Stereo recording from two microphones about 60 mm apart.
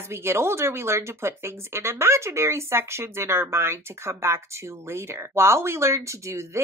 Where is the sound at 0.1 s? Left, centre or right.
Right.